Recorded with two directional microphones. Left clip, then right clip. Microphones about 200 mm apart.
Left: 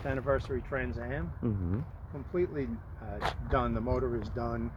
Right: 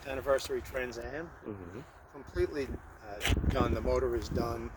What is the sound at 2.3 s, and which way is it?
Speech, 70° right (ahead or behind).